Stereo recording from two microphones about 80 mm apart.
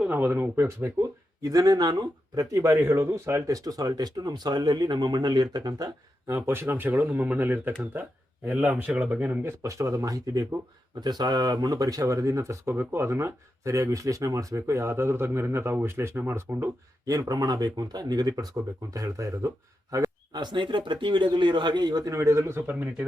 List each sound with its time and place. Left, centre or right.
0.0 s speech: right
1.4 s speech: right
2.8 s speech: right
6.2 s speech: right; by 9.4 s centre
9.4 s speech: right
11.0 s speech: right
17.1 s speech: right
20.3 s speech: right
22.1 s speech: right
22.7 s speech: centre